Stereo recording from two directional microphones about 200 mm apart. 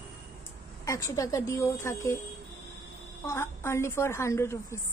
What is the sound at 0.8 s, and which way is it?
A woman's voice, 15° left (ahead or behind).